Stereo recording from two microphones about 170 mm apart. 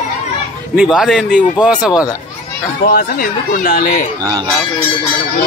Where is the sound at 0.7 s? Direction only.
5° right (ahead or behind).